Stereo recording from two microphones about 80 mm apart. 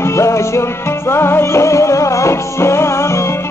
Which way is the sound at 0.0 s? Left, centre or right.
Left.